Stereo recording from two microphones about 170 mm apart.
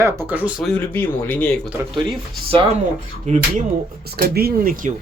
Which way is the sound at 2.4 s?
30° right (ahead or behind).